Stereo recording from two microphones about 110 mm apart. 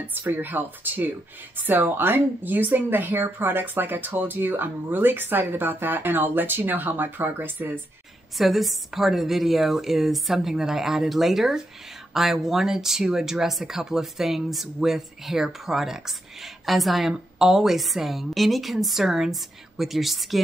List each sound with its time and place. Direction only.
0.0 s speech: 15° right (ahead or behind)
8.4 s speech: centre (ahead or behind)